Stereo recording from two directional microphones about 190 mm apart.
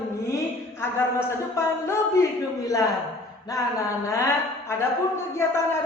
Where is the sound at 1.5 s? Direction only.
15° left (ahead or behind).